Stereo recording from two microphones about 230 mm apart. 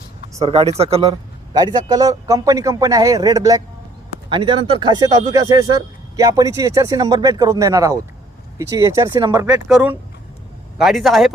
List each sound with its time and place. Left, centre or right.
0.3 s speech: right
1.5 s speech: centre
9.6 s a man's voice: centre